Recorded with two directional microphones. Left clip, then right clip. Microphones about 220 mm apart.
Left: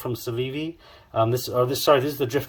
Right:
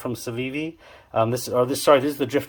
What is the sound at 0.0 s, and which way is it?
Speech, 15° right (ahead or behind).